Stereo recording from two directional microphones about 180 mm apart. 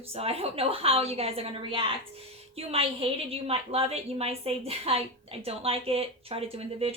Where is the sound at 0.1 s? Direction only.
35° right (ahead or behind).